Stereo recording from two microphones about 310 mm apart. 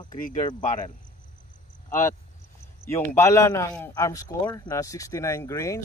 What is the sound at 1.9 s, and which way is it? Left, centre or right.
A man's voice, centre.